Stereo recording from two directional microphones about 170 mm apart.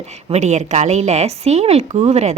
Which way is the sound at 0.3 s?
40° right (ahead or behind).